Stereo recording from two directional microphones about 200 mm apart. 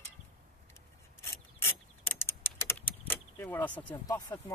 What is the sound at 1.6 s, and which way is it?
Keys jangling, 10° left (ahead or behind).